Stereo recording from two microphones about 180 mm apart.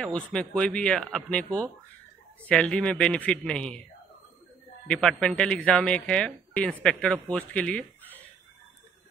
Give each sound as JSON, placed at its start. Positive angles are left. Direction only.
{"t": 0.0, "sound": "speech", "side_deg": 5}
{"t": 4.8, "sound": "speech", "side_deg": 5}